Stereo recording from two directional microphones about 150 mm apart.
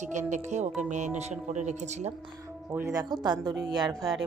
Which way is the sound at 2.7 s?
15° right (ahead or behind).